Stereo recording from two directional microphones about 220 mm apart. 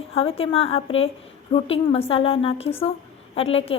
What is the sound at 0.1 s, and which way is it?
A woman's voice, 25° left (ahead or behind).